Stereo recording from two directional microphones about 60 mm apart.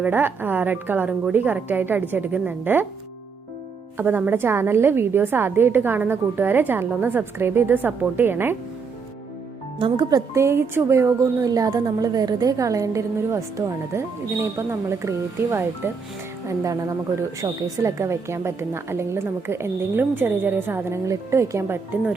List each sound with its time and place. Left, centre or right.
0.1 s a woman's voice: right
3.9 s a woman's voice: right
10.3 s a woman's voice: right
16.5 s a woman's voice: right
20.0 s a woman's voice: right
20.9 s a woman's voice: right